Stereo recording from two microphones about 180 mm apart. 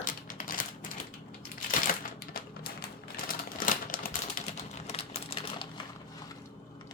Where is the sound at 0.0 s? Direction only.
50° left (ahead or behind).